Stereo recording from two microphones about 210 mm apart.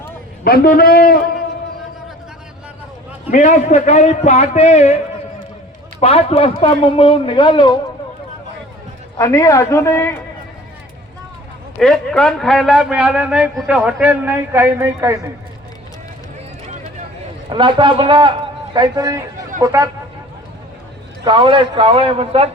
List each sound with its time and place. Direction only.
0.4 s a man's voice: 45° left (ahead or behind)
3.2 s a man's voice: 35° left (ahead or behind)
6.0 s a man's voice: 30° left (ahead or behind)
9.1 s a man's voice: 15° left (ahead or behind)
11.8 s a man's voice: centre (ahead or behind); by 15.3 s 15° right (ahead or behind)
17.5 s a man's voice: 25° right (ahead or behind)
21.2 s a man's voice: 25° right (ahead or behind)